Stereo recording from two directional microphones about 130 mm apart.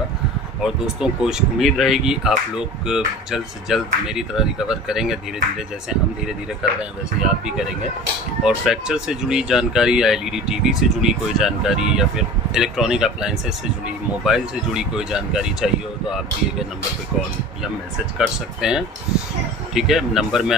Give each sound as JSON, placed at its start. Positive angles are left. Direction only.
{"t": 0.6, "sound": "speech", "side_deg": -5}
{"t": 6.8, "sound": "speech", "side_deg": -5}
{"t": 18.1, "sound": "speech", "side_deg": -5}